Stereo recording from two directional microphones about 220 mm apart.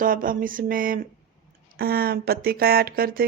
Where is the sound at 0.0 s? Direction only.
40° right (ahead or behind).